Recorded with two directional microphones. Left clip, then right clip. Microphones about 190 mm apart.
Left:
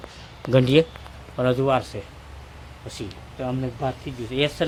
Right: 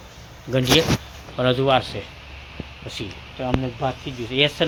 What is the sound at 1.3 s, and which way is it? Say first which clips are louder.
A man's voice: right 2 dB; 10° left (ahead or behind).